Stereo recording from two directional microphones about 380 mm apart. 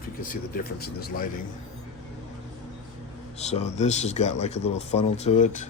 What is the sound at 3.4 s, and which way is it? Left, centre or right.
Speech, centre.